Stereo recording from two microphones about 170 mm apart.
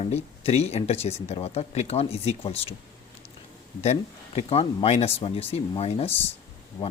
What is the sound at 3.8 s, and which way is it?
Speech, 40° left (ahead or behind).